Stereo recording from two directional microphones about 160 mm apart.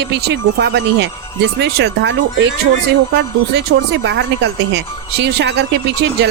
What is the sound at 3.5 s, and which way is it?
Speech, 90° right.